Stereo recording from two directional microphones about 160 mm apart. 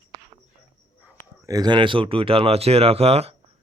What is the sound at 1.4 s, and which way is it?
Speech, 25° right (ahead or behind).